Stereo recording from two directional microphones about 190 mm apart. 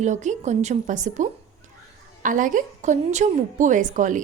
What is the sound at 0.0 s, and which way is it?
A woman's voice, 40° right (ahead or behind).